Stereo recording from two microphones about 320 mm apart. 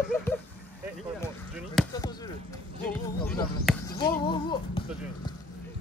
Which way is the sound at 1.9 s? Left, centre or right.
Centre.